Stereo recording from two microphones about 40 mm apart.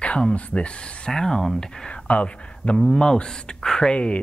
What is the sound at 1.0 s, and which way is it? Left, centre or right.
Speech, centre.